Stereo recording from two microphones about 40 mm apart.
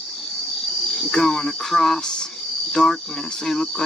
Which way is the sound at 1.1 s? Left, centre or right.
Centre.